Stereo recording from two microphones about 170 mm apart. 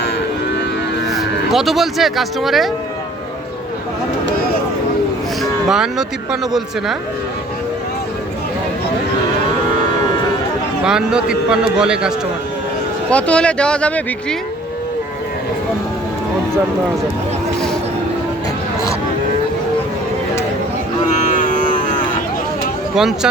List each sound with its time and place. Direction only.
1.1 s speech: centre (ahead or behind)
5.4 s a sound: centre (ahead or behind)
10.8 s a man's voice: 5° right (ahead or behind)
13.1 s speech: 5° left (ahead or behind)
21.1 s cattle: 50° left (ahead or behind)
23.0 s a man's voice: centre (ahead or behind)